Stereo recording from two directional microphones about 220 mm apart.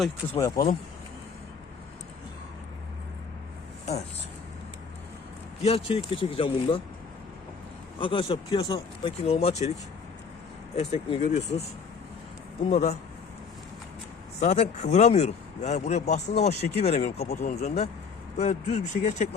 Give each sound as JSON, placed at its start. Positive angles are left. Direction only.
{"t": 0.5, "sound": "speech", "side_deg": 40}
{"t": 5.6, "sound": "speech", "side_deg": 25}
{"t": 7.9, "sound": "speech", "side_deg": 25}
{"t": 10.8, "sound": "speech", "side_deg": 30}
{"t": 12.6, "sound": "speech", "side_deg": 30}
{"t": 14.4, "sound": "speech", "side_deg": 30}